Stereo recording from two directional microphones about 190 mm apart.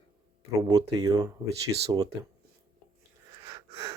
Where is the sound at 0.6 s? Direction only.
20° right (ahead or behind).